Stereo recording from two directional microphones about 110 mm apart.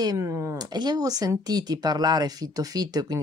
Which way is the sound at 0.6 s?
40° right (ahead or behind).